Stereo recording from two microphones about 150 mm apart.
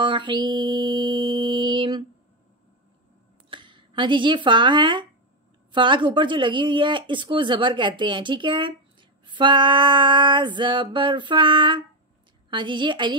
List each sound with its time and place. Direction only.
0.0 s music: 30° right (ahead or behind)
3.4 s speech: 35° right (ahead or behind)